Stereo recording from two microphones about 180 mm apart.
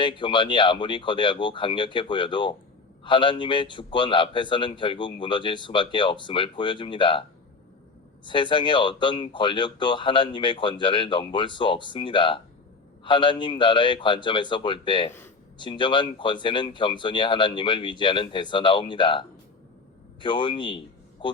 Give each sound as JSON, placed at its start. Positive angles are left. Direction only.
{"t": 0.0, "sound": "a man's voice", "side_deg": 25}
{"t": 20.2, "sound": "speech", "side_deg": 25}